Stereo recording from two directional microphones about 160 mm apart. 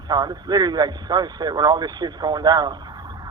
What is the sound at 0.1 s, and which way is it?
A man's voice, 25° right (ahead or behind).